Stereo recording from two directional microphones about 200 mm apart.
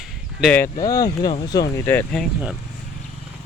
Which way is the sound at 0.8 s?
15° left (ahead or behind).